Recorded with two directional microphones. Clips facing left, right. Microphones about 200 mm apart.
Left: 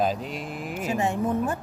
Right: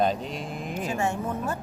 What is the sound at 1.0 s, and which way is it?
Speech, 15° left (ahead or behind).